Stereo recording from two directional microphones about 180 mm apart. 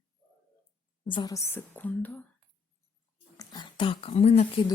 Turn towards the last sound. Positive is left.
turn(degrees=35)  # may be behind; listen again after turning